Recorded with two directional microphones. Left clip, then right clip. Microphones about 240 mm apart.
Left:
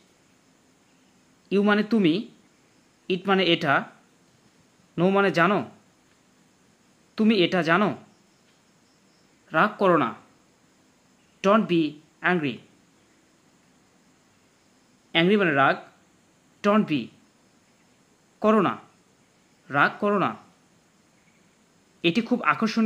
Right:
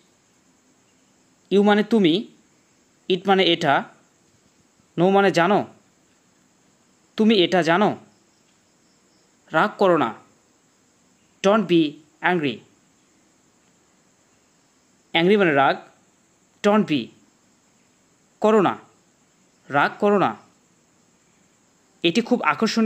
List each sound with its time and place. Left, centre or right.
1.5 s speech: right
4.9 s speech: right
7.2 s speech: right
9.5 s speech: right
11.4 s speech: right
15.0 s speech: right
18.4 s speech: right
22.0 s speech: right